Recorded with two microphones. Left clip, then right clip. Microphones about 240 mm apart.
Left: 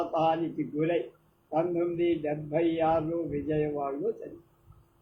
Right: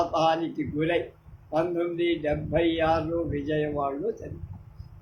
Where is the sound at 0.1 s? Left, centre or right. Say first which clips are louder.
Right 3 dB; right.